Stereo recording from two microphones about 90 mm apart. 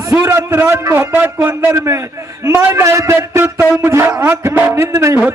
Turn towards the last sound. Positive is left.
turn(degrees=-30)  # may be behind; listen again after turning